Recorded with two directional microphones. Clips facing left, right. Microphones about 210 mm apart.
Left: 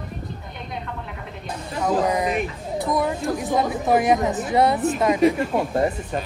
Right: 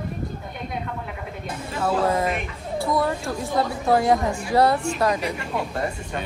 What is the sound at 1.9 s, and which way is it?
A woman's voice, 15° left (ahead or behind).